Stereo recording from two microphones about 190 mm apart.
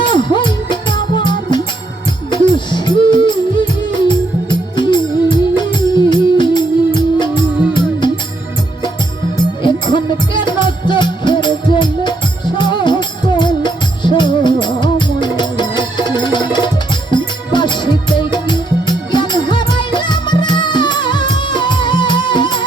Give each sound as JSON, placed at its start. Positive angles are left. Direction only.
{"t": 0.0, "sound": "music", "side_deg": 25}
{"t": 9.6, "sound": "music", "side_deg": 25}